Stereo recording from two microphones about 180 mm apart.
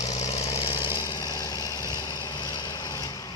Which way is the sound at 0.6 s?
30° left (ahead or behind).